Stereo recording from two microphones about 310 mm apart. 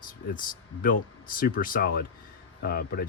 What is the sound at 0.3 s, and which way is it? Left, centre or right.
Speech, left.